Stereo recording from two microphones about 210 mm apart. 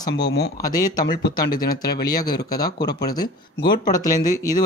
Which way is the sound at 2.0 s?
20° left (ahead or behind).